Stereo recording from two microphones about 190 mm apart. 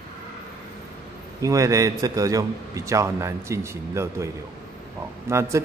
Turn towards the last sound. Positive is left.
turn(degrees=-15)  # may be behind; listen again after turning